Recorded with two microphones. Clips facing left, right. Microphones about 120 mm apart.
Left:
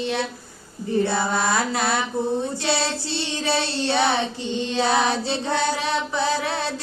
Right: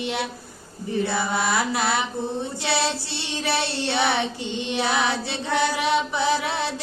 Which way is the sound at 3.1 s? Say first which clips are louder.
Left 2 dB; 20° left (ahead or behind).